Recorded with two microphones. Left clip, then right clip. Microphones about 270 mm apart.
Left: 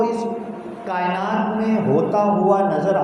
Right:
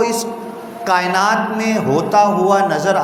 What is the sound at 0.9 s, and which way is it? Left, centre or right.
Speech, right.